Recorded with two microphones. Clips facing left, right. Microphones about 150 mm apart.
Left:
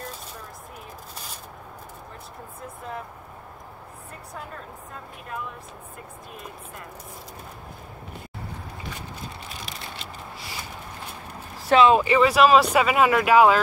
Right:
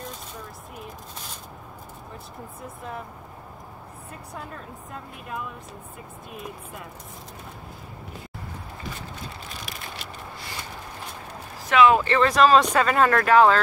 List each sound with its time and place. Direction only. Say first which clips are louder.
11.7 s speech: left 1 dB; 25° left (ahead or behind)
12.0 s speech: left 1 dB; 10° left (ahead or behind)